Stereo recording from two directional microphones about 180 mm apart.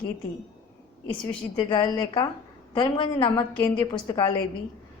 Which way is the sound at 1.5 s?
25° left (ahead or behind).